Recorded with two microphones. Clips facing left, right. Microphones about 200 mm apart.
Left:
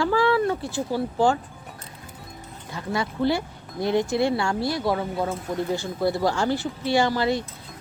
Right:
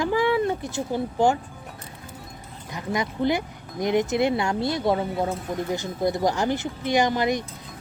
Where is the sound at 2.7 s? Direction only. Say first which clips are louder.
Even; 20° right (ahead or behind).